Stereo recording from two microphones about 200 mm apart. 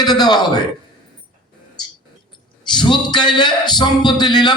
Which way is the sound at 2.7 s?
20° left (ahead or behind).